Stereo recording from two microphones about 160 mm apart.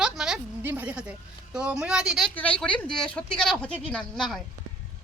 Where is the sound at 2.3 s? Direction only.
10° left (ahead or behind).